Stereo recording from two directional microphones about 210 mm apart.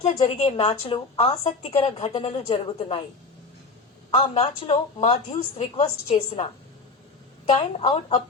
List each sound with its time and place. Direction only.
0.0 s a woman's voice: 30° left (ahead or behind)
4.1 s a woman's voice: 25° left (ahead or behind)
7.5 s a woman's voice: 25° left (ahead or behind)